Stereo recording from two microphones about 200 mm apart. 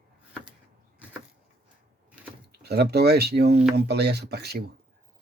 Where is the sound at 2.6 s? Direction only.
55° right (ahead or behind).